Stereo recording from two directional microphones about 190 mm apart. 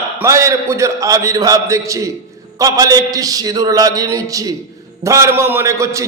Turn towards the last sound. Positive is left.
turn(degrees=-15)  # may be behind; listen again after turning